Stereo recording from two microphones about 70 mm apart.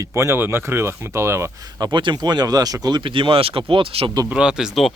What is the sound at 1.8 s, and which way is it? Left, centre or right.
Speech, right.